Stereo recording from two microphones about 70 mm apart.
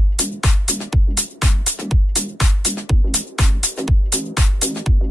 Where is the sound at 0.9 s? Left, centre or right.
Centre.